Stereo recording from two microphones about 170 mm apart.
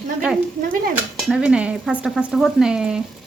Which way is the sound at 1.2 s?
5° right (ahead or behind).